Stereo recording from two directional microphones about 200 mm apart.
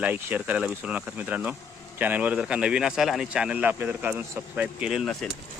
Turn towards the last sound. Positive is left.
turn(degrees=0)  # may be behind; listen again after turning